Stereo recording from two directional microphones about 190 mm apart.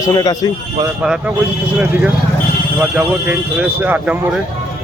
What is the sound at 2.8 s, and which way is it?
Speech, 5° right (ahead or behind).